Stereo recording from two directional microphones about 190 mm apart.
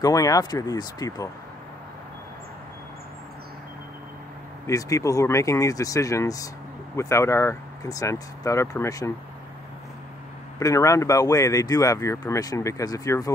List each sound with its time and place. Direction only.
0.0 s speech: 20° left (ahead or behind)
4.6 s speech: 15° left (ahead or behind)
10.6 s speech: 15° left (ahead or behind)